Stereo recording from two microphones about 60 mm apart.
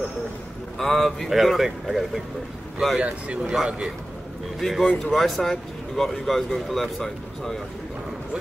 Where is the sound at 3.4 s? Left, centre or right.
Centre.